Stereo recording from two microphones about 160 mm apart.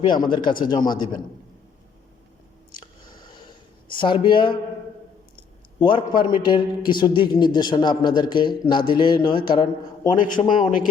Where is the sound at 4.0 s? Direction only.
30° left (ahead or behind).